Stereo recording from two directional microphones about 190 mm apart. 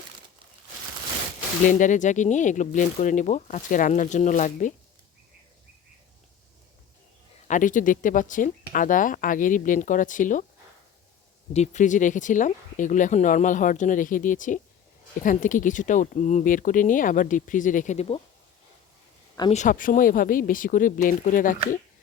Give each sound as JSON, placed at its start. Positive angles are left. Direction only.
{"t": 1.6, "sound": "speech", "side_deg": 40}
{"t": 7.4, "sound": "speech", "side_deg": 40}
{"t": 11.5, "sound": "speech", "side_deg": 40}
{"t": 19.4, "sound": "speech", "side_deg": 35}